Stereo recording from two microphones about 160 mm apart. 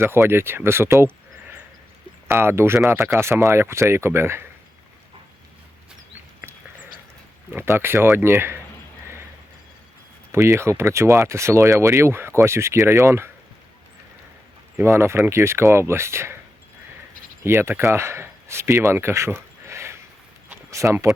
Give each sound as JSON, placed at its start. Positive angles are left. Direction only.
{"t": 0.0, "sound": "speech", "side_deg": -15}
{"t": 7.5, "sound": "speech", "side_deg": -15}
{"t": 10.3, "sound": "speech", "side_deg": -15}
{"t": 14.8, "sound": "speech", "side_deg": -15}
{"t": 17.4, "sound": "speech", "side_deg": -15}
{"t": 20.5, "sound": "a sound", "side_deg": -20}